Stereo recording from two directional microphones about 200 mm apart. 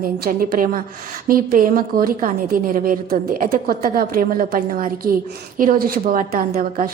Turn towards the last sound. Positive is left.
turn(degrees=-45)  # may be behind; listen again after turning